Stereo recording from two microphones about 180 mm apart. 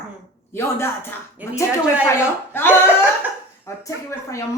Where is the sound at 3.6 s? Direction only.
15° left (ahead or behind).